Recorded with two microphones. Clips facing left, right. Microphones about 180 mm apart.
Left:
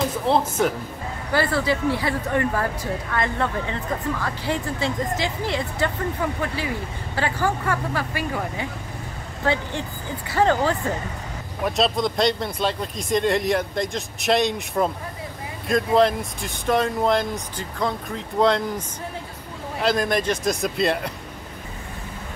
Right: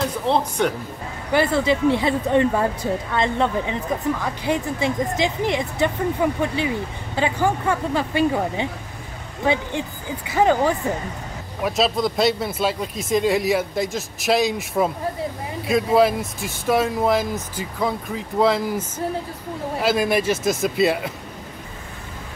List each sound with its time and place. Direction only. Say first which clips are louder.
0.0 s speech: even; 5° left (ahead or behind)
1.3 s a woman's voice: right 3 dB; 20° right (ahead or behind)
11.6 s speech: right 1 dB; centre (ahead or behind)